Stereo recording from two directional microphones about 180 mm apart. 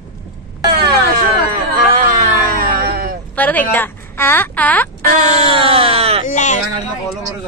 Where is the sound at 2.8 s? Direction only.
55° right (ahead or behind).